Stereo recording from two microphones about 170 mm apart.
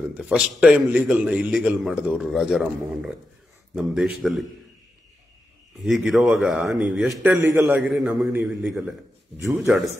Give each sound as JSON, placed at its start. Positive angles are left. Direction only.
{"t": 0.1, "sound": "a man's voice", "side_deg": -5}
{"t": 5.8, "sound": "a man's voice", "side_deg": 0}
{"t": 7.3, "sound": "a man's voice", "side_deg": -15}
{"t": 7.9, "sound": "a man's voice", "side_deg": -5}
{"t": 9.4, "sound": "a man's voice", "side_deg": -15}